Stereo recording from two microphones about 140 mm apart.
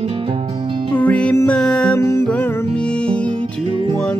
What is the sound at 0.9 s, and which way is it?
Music, 10° left (ahead or behind).